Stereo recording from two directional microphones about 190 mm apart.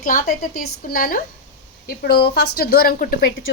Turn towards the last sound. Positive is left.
turn(degrees=50)  # may be behind; listen again after turning